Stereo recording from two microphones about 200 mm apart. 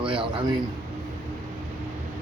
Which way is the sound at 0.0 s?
25° right (ahead or behind).